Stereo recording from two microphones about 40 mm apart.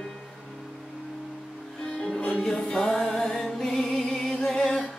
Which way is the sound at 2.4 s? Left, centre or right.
Centre.